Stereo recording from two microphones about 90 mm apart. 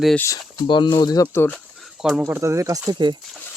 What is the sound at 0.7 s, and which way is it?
Speech, 60° left (ahead or behind).